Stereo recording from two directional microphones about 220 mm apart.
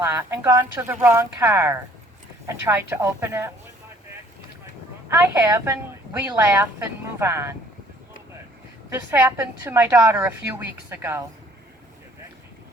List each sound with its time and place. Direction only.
0.0 s a woman's voice: 10° right (ahead or behind)
5.0 s a woman's voice: 10° right (ahead or behind)
8.9 s a woman's voice: 10° right (ahead or behind)